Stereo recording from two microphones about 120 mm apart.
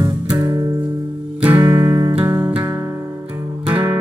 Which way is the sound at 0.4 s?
30° right (ahead or behind).